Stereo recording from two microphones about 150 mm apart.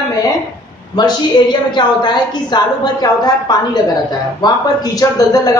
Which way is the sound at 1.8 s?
30° left (ahead or behind).